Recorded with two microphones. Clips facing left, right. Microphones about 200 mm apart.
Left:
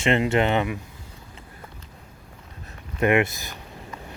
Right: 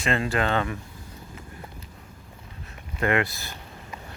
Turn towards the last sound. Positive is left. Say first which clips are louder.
# left 4 dB
turn(degrees=20)  # may be behind; listen again after turning